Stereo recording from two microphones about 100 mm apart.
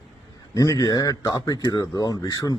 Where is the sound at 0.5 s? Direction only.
35° left (ahead or behind).